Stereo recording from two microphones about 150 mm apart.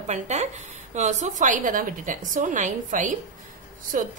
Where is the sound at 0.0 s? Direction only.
50° right (ahead or behind).